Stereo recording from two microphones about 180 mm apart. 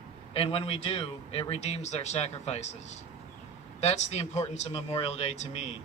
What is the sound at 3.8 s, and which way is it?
A man's voice, 35° left (ahead or behind).